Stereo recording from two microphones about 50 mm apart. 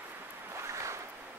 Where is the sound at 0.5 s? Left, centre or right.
Right.